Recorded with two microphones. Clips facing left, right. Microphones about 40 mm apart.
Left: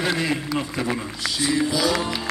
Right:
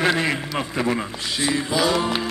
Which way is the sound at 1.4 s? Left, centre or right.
Right.